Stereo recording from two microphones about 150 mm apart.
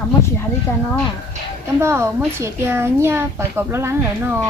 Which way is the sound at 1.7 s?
15° right (ahead or behind).